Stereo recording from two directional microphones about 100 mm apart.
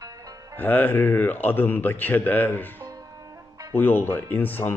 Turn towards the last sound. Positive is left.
turn(degrees=20)  # may be behind; listen again after turning